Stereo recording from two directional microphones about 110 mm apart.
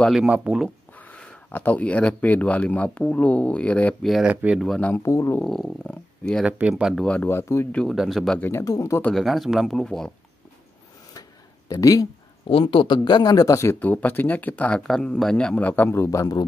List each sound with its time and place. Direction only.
0.1 s speech: 10° right (ahead or behind)
0.9 s speech: 15° left (ahead or behind)
4.3 s speech: 15° right (ahead or behind)
4.6 s speech: centre (ahead or behind)
4.8 s speech: 25° left (ahead or behind)
5.4 s speech: centre (ahead or behind)
6.4 s speech: 5° right (ahead or behind)
7.1 s speech: 10° left (ahead or behind)
7.3 s speech: 25° left (ahead or behind)
7.9 s speech: 5° right (ahead or behind)
8.4 s speech: 20° left (ahead or behind)
9.1 s speech: centre (ahead or behind)
11.7 s speech: 35° left (ahead or behind)
12.4 s speech: 55° left (ahead or behind); by 16.4 s 35° left (ahead or behind)